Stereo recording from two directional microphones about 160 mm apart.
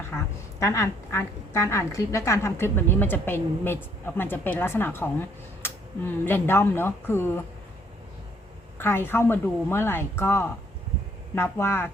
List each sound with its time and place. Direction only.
0.6 s speech: 20° left (ahead or behind)
6.2 s speech: 15° left (ahead or behind)
8.8 s speech: 15° left (ahead or behind)